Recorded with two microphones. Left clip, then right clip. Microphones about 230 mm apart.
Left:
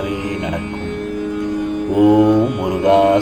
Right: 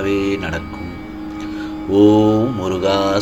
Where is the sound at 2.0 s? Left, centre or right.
Right.